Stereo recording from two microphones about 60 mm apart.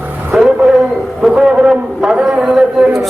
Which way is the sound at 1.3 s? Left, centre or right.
Centre.